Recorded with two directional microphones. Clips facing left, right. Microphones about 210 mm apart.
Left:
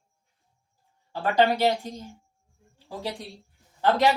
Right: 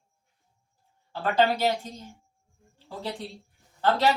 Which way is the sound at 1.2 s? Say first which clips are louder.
Left 2 dB; 15° left (ahead or behind).